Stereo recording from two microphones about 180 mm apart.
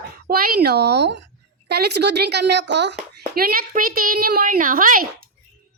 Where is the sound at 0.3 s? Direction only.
55° right (ahead or behind); by 2.9 s 75° right (ahead or behind).